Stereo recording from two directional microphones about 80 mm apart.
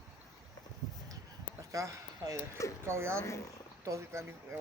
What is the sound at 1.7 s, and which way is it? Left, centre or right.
Speech, right.